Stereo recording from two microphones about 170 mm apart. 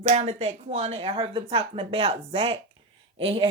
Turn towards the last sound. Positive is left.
turn(degrees=-35)  # may be behind; listen again after turning